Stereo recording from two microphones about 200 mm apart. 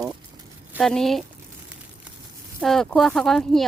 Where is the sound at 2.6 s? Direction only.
Centre (ahead or behind).